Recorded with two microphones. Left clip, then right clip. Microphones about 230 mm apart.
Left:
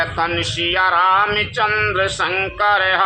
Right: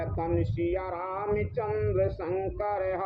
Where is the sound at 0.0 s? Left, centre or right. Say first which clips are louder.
Left 12 dB; left.